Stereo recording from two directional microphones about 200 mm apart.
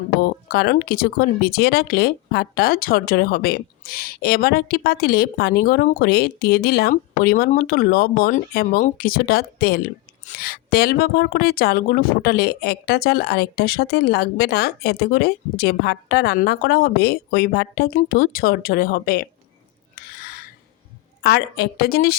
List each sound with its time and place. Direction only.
0.2 s speech: 50° left (ahead or behind)
20.0 s a sound: 50° left (ahead or behind)
21.2 s speech: 50° left (ahead or behind)